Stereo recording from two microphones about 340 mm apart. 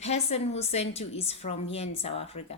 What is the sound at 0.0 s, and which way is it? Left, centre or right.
A woman's voice, centre.